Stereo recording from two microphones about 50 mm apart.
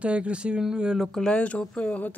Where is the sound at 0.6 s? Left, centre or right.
Centre.